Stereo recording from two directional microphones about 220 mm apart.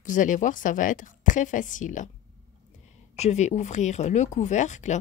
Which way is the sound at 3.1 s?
30° left (ahead or behind).